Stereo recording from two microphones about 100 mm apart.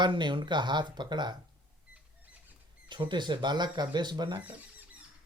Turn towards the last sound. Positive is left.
turn(degrees=-45)  # may be behind; listen again after turning